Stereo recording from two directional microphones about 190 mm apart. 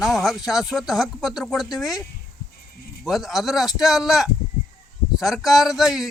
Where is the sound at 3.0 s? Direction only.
Centre (ahead or behind).